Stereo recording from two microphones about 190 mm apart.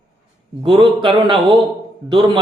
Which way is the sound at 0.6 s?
25° right (ahead or behind).